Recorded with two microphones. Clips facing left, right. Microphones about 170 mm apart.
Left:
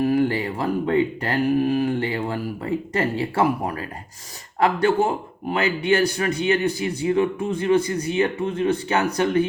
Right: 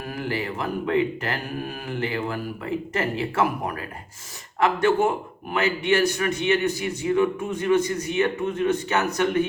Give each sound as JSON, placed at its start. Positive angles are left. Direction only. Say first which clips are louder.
{"t": 0.0, "sound": "a man's voice", "louder": "left 9 dB", "side_deg": 30}